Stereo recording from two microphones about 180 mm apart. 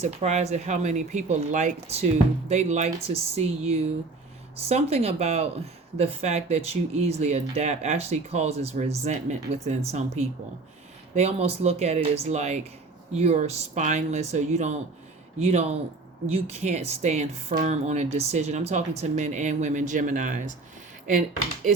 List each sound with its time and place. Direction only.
0.0 s speech: 40° right (ahead or behind)
11.1 s speech: 35° right (ahead or behind)